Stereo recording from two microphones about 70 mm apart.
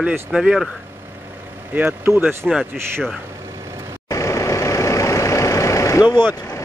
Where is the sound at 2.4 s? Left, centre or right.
Centre.